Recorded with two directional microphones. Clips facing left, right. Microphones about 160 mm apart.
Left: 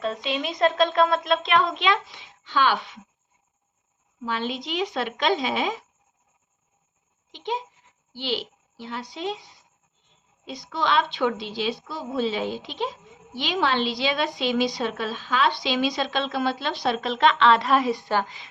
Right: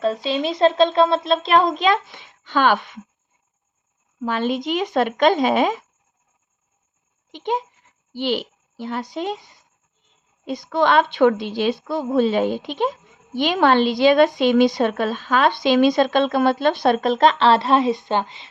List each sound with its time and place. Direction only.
0.0 s speech: 35° right (ahead or behind); by 3.0 s 50° right (ahead or behind)
4.2 s a woman's voice: 50° right (ahead or behind)
7.3 s a child's voice: 50° right (ahead or behind); by 18.4 s 25° right (ahead or behind)